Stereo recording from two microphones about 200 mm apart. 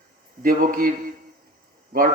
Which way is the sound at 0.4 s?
45° right (ahead or behind).